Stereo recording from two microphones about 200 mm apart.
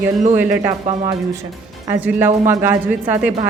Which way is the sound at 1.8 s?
10° right (ahead or behind).